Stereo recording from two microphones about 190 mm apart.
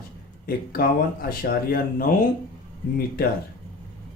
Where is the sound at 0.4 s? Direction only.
50° left (ahead or behind).